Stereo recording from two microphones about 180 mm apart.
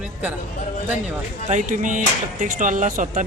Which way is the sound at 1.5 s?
45° right (ahead or behind).